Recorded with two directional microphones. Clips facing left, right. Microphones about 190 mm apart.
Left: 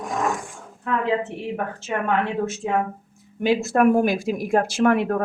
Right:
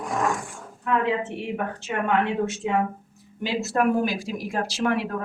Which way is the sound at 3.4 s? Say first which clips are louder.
Left 5 dB; 50° left (ahead or behind).